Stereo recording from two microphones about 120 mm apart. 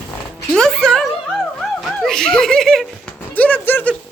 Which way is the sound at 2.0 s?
5° left (ahead or behind).